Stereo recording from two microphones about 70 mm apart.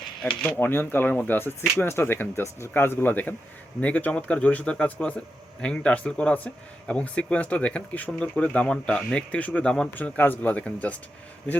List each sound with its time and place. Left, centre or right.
0.4 s speech: left; by 9.9 s centre
9.9 s speech: left